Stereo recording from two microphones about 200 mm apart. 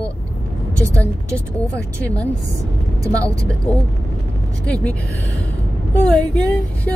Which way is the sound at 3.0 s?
15° right (ahead or behind).